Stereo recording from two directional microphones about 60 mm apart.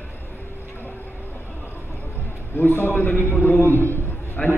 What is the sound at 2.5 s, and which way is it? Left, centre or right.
A man's voice, left.